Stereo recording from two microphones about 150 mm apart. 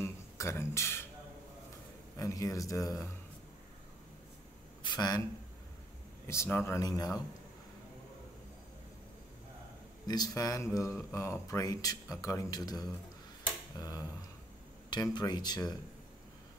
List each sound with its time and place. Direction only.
0.0 s a sound: 20° left (ahead or behind)
2.1 s speech: 20° left (ahead or behind)
4.8 s speech: 25° left (ahead or behind)
6.2 s speech: 15° left (ahead or behind)
10.0 s speech: 25° left (ahead or behind)